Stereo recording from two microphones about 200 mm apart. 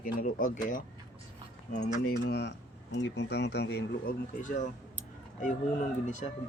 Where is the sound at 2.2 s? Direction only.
60° left (ahead or behind).